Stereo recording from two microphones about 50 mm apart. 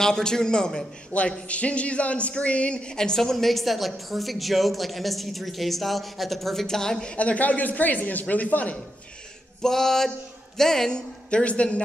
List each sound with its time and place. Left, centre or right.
0.0 s a man's voice: centre
1.1 s speech: left
7.2 s a man's voice: left
9.6 s a man's voice: centre
11.2 s a woman's voice: left